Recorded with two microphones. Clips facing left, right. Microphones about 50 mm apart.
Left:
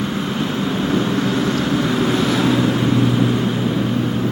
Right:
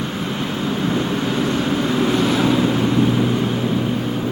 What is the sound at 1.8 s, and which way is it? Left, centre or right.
Vehicle, centre.